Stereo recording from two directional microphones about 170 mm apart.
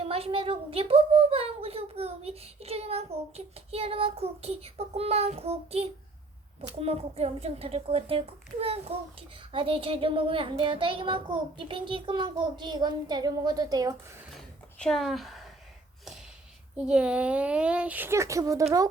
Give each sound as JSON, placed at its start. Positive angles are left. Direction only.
{"t": 0.0, "sound": "a woman's voice", "side_deg": -35}
{"t": 14.3, "sound": "a sound", "side_deg": 0}
{"t": 16.7, "sound": "speech", "side_deg": -5}